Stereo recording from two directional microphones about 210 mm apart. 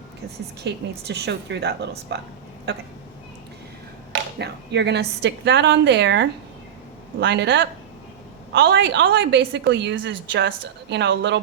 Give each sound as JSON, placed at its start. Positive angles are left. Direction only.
{"t": 0.6, "sound": "speech", "side_deg": -55}
{"t": 4.1, "sound": "a woman's voice", "side_deg": -55}